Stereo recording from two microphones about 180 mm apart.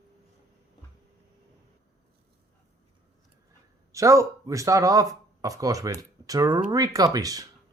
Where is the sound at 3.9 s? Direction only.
15° right (ahead or behind).